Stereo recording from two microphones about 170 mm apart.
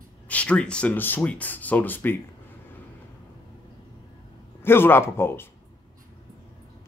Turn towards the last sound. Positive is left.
turn(degrees=15)  # may be behind; listen again after turning